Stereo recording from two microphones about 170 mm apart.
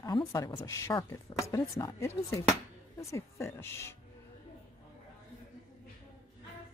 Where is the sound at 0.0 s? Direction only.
20° left (ahead or behind).